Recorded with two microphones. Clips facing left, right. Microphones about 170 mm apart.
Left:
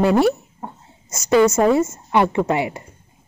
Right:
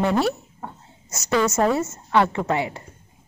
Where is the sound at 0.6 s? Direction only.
20° left (ahead or behind).